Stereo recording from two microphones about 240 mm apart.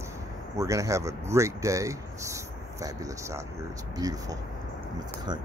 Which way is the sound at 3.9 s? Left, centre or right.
Centre.